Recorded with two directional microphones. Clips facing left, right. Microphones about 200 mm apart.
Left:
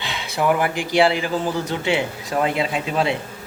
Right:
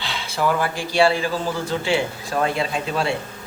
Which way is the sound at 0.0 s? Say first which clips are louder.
Left 1 dB; 20° left (ahead or behind).